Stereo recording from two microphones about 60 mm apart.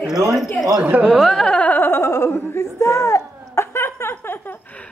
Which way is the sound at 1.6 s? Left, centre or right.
Left.